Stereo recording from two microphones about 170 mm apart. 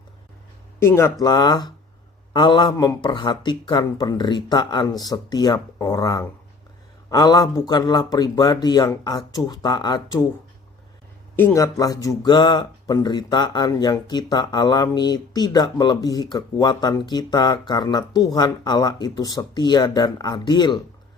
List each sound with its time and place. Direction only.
0.8 s speech: 15° left (ahead or behind)
11.3 s speech: 15° left (ahead or behind)